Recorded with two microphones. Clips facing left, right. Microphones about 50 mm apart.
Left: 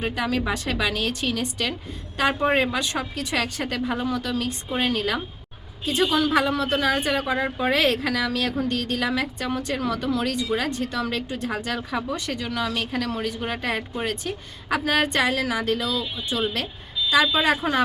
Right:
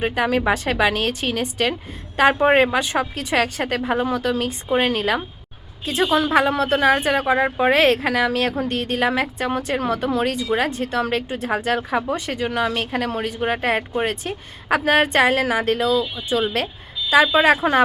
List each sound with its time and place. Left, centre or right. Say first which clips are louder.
0.0 s speech: right 5 dB; right
2.6 s speech: right 5 dB; right
6.0 s speech: right 3 dB; centre
6.3 s speech: right 4 dB; right